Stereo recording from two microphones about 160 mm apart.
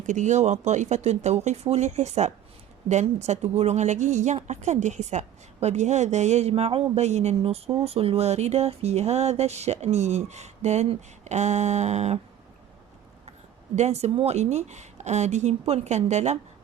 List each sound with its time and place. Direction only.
0.0 s a woman's voice: 50° right (ahead or behind)
13.7 s a woman's voice: 40° right (ahead or behind)